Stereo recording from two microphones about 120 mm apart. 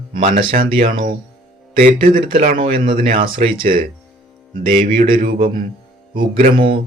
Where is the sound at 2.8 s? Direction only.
45° right (ahead or behind).